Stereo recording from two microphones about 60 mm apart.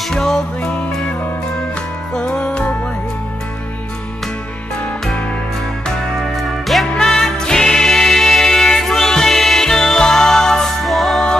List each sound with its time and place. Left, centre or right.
0.1 s music: centre
2.1 s music: centre
5.9 s music: centre